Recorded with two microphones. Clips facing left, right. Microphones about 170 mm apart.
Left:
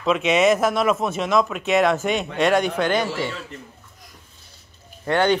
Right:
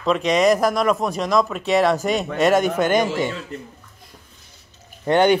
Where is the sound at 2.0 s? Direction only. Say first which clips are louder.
Right 2 dB; 40° right (ahead or behind).